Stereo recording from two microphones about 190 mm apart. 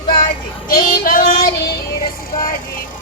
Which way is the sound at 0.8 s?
45° left (ahead or behind).